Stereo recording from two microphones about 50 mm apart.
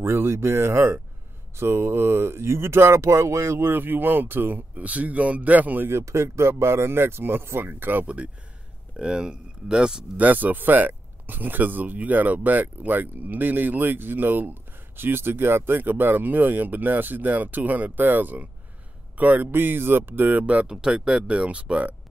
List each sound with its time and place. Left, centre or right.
0.0 s speech: right
3.7 s speech: right
4.8 s speech: right
5.9 s speech: right
8.9 s speech: centre
10.1 s speech: right
20.6 s speech: centre